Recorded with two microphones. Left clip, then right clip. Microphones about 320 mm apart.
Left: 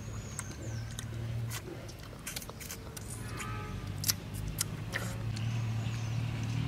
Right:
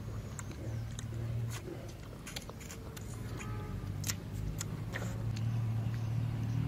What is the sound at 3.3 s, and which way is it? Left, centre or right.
Music, centre.